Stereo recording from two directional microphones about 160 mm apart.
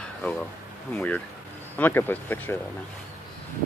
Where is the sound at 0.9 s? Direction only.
10° left (ahead or behind).